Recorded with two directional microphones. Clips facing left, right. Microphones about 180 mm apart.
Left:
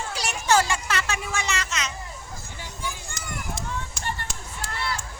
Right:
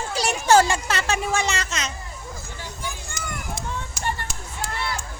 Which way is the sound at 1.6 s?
35° right (ahead or behind).